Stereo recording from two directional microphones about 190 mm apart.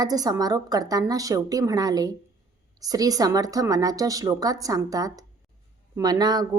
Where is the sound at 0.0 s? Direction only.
20° right (ahead or behind).